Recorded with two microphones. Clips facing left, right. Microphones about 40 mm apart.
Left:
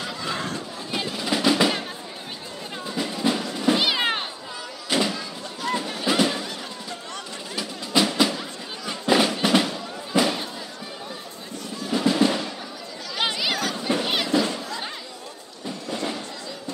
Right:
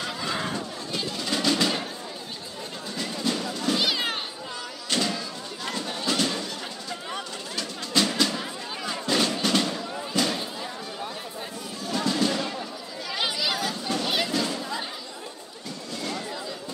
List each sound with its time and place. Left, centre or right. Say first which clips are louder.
0.0 s chatter: even; centre
0.9 s music: left 3 dB; centre
2.9 s music: left 4 dB; centre
4.8 s a sound: left 3 dB; centre
7.5 s music: left 3 dB; centre
8.3 s music: left 1 dB; centre
9.0 s music: left 5 dB; centre
10.1 s a sound: left 5 dB; centre
11.9 s music: left 4 dB; centre
13.2 s chatter: left 3 dB; centre
13.8 s a sound: left 3 dB; left
15.9 s a sound: left 4 dB; left